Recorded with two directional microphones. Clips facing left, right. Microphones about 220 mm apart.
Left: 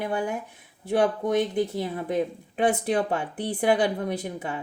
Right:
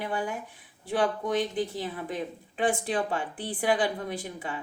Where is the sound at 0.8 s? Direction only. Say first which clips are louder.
Left 4 dB; 55° left (ahead or behind).